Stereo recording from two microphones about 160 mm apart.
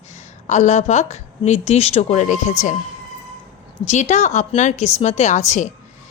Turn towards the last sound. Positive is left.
turn(degrees=45)  # may be behind; listen again after turning